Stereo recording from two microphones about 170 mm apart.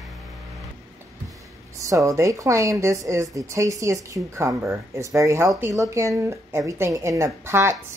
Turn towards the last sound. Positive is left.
turn(degrees=-15)  # may be behind; listen again after turning